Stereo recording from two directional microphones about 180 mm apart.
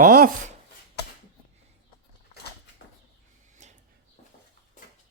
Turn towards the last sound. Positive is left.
turn(degrees=-40)  # may be behind; listen again after turning